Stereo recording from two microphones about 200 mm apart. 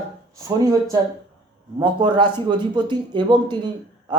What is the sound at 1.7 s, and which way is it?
A man's voice, 20° right (ahead or behind).